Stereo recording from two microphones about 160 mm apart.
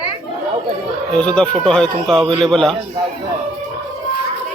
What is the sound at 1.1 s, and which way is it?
Speech, 5° left (ahead or behind).